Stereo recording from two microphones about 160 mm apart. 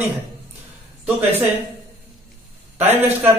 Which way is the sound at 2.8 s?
10° right (ahead or behind).